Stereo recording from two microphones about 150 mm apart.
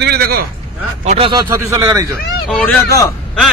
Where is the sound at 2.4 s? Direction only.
10° left (ahead or behind).